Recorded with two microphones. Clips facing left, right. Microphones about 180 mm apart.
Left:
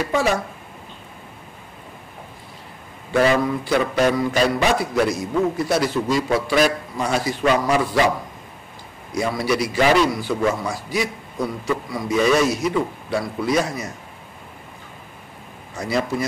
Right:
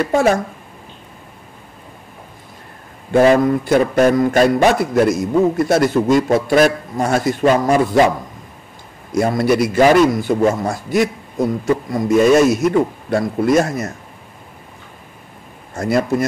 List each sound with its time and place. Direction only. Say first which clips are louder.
0.0 s a man's voice: right 6 dB; 45° right (ahead or behind)
3.2 s a man's voice: right 6 dB; 45° right (ahead or behind)
9.1 s a man's voice: right 6 dB; 50° right (ahead or behind)
15.7 s a man's voice: right 6 dB; 50° right (ahead or behind)